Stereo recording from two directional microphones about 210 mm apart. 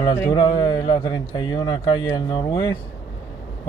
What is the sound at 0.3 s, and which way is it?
Speech, 20° left (ahead or behind).